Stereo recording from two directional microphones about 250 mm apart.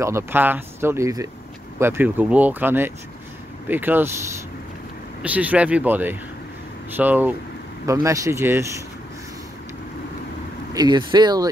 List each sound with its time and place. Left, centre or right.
0.0 s speech: centre
5.2 s speech: centre
10.7 s speech: centre